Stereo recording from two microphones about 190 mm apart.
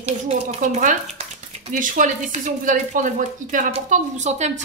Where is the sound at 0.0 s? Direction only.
35° right (ahead or behind).